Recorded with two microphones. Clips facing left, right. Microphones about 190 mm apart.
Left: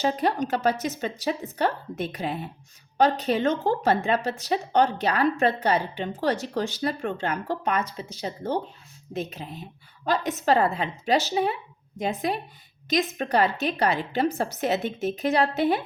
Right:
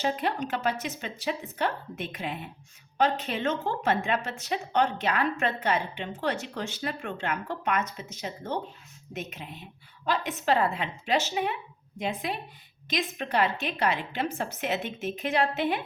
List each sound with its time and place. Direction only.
0.0 s speech: 40° left (ahead or behind)